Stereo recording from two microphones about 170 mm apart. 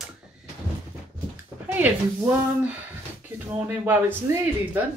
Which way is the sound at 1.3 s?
10° right (ahead or behind).